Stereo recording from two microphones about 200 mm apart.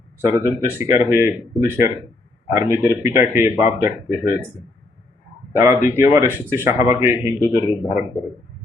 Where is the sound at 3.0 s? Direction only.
10° right (ahead or behind).